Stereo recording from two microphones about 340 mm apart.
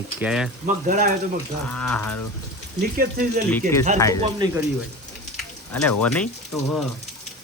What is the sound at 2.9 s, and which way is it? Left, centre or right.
Speech, right.